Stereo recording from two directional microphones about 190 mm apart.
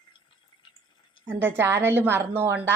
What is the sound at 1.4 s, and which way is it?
A woman's voice, 10° right (ahead or behind).